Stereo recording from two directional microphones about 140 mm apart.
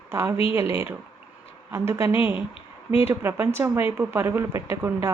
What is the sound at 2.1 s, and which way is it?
Speech, 40° left (ahead or behind).